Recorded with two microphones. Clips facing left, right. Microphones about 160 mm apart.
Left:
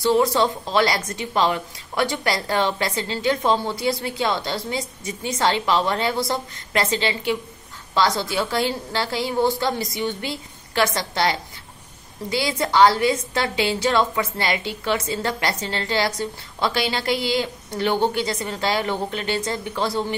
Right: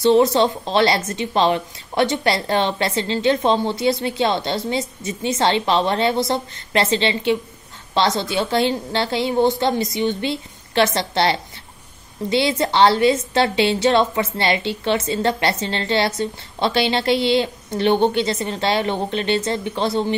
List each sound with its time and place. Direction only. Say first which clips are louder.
0.0 s a woman's voice: right 4 dB; 25° right (ahead or behind)